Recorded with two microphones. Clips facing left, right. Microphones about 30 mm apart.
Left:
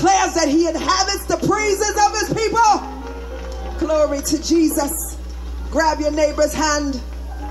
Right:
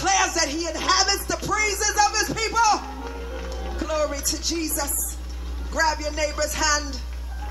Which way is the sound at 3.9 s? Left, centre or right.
Right.